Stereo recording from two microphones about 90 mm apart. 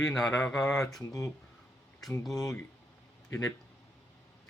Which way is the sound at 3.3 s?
30° left (ahead or behind).